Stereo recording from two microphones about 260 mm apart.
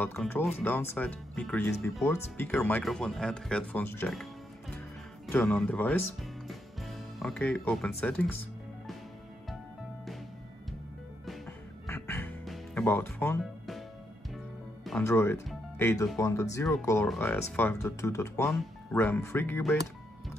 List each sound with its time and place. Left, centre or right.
0.0 s speech: centre
11.9 s music: centre
14.9 s speech: centre